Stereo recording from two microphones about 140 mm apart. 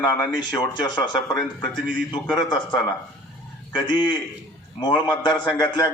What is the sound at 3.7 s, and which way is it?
A man's voice, 35° left (ahead or behind).